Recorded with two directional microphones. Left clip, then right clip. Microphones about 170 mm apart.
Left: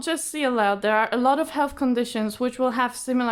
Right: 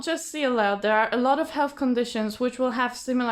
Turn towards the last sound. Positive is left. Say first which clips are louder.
# left 2 dB
turn(degrees=25)  # may be behind; listen again after turning